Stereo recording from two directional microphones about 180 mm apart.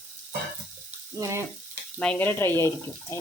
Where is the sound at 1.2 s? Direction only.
15° right (ahead or behind).